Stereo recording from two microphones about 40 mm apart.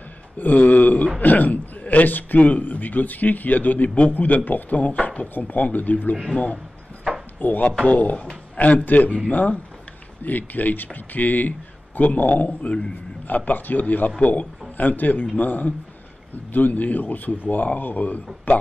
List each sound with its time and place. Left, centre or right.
0.4 s a man's voice: left
5.4 s a man's voice: left
6.3 s speech: left
7.3 s speech: left
7.6 s speech: left
8.8 s a man's voice: left